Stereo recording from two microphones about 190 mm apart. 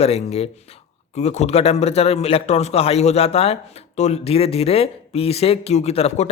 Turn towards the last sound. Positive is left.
turn(degrees=35)  # may be behind; listen again after turning